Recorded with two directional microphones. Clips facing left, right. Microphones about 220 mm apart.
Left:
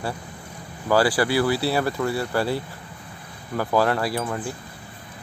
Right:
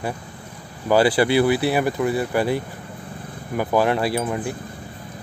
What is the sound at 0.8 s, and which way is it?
Speech, 20° right (ahead or behind).